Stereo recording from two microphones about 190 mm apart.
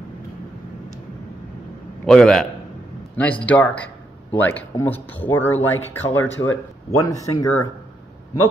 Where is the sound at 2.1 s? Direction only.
5° left (ahead or behind).